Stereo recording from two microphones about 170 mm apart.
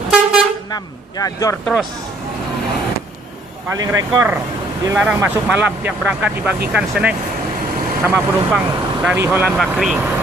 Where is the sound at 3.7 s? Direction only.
20° right (ahead or behind).